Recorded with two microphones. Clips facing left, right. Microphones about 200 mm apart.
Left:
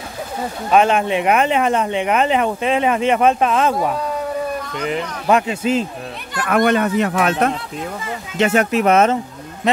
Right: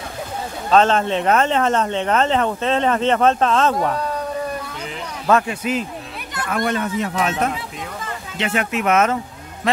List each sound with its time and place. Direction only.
0.7 s speech: 15° left (ahead or behind)
4.7 s speech: 65° left (ahead or behind)
5.2 s speech: 20° left (ahead or behind)
6.5 s speech: 70° left (ahead or behind)
8.4 s speech: 45° left (ahead or behind)